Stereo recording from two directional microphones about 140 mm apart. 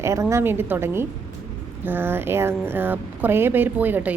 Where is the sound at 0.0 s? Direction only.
20° right (ahead or behind).